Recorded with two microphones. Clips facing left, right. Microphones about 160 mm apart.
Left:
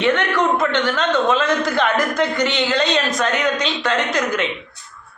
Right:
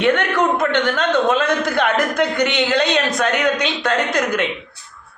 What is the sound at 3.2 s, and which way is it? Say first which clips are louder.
A woman's voice: right 1 dB; 50° right (ahead or behind).